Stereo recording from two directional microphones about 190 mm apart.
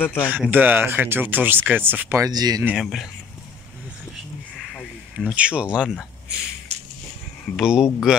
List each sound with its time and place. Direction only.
0.0 s speech: 10° left (ahead or behind)
0.3 s speech: 10° right (ahead or behind)
2.6 s speech: 5° right (ahead or behind)
4.7 s a sound: 5° right (ahead or behind)
6.7 s a sound: 35° right (ahead or behind)
7.5 s speech: 5° right (ahead or behind)